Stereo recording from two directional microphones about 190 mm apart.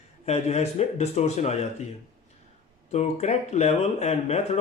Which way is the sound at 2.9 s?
35° left (ahead or behind).